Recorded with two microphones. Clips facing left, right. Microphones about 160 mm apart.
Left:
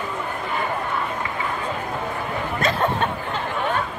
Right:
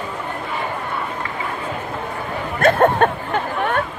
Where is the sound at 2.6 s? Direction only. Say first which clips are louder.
Right 9 dB; 55° right (ahead or behind).